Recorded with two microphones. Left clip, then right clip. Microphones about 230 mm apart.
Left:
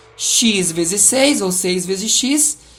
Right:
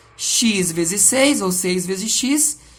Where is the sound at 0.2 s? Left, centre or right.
Right.